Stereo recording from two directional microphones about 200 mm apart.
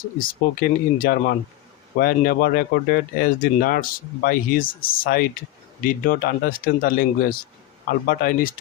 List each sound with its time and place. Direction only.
0.2 s speech: 45° left (ahead or behind)